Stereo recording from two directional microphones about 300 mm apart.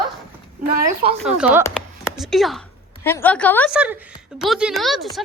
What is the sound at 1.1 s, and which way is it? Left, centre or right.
A woman's voice, centre.